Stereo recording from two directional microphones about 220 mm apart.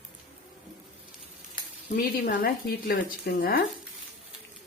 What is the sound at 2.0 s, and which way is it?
A woman's voice, 45° left (ahead or behind).